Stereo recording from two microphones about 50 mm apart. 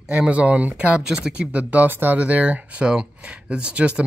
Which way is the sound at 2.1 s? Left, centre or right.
Right.